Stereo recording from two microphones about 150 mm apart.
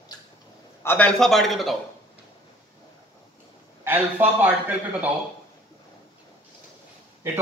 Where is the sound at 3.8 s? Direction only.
15° right (ahead or behind).